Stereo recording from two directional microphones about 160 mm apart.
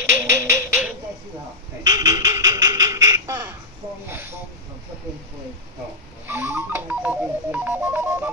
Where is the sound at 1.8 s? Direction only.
25° right (ahead or behind).